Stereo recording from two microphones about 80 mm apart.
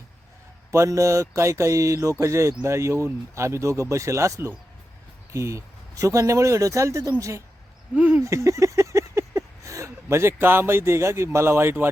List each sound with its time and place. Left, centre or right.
0.7 s speech: right
7.9 s speech: centre
8.2 s a sound: right